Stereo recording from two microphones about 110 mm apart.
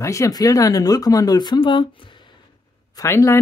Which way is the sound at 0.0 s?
30° left (ahead or behind).